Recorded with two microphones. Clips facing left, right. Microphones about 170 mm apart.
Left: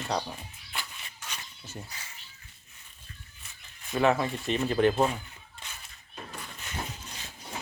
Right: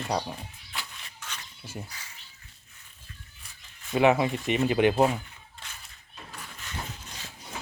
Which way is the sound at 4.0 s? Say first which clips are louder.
Right 3 dB; 15° right (ahead or behind).